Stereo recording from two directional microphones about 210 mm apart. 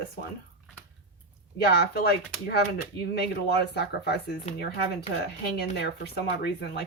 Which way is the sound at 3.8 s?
50° left (ahead or behind).